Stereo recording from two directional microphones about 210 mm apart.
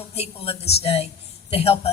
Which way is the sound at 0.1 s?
30° left (ahead or behind).